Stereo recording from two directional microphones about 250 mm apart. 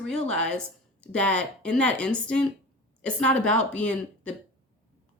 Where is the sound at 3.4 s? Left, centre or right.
Right.